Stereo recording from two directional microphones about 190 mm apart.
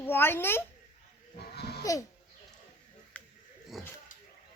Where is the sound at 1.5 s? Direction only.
55° left (ahead or behind).